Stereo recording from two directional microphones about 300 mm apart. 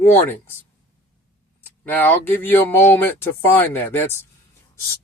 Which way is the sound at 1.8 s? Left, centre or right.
Centre.